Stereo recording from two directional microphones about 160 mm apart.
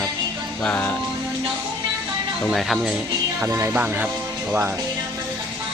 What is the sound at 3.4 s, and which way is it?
Speech, 15° right (ahead or behind).